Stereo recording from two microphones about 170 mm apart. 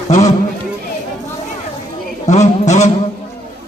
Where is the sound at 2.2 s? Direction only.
40° left (ahead or behind).